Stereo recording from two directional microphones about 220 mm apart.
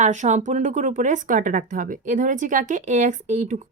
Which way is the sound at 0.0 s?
35° right (ahead or behind).